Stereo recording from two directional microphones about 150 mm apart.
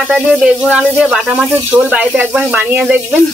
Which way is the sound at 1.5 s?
10° right (ahead or behind).